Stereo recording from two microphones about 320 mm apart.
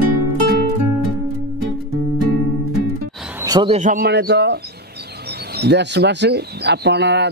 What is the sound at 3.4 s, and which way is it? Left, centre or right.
Speech, centre.